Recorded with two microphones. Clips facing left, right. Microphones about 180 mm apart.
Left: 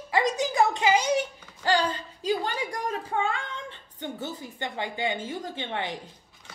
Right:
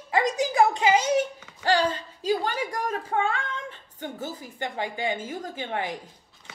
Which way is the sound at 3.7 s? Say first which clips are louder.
Even; 25° left (ahead or behind).